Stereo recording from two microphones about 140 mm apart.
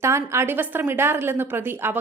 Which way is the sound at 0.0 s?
20° right (ahead or behind).